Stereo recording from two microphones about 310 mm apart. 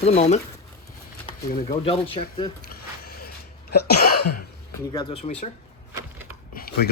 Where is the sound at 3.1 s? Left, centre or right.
Left.